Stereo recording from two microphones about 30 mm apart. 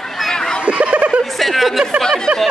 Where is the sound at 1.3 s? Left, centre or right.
Centre.